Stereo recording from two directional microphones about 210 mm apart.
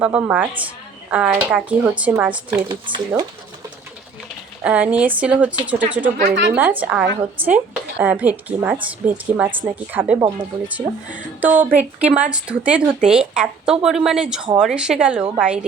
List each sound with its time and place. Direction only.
0.0 s a woman's voice: 5° right (ahead or behind)
2.6 s speech: 25° right (ahead or behind)
4.6 s a woman's voice: 5° right (ahead or behind)
6.0 s speech: 40° right (ahead or behind)
6.5 s a woman's voice: 10° right (ahead or behind)